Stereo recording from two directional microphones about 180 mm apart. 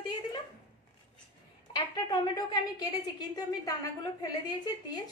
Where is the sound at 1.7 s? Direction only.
25° left (ahead or behind).